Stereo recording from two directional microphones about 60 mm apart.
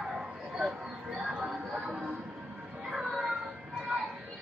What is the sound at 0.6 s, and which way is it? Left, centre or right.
Music, centre.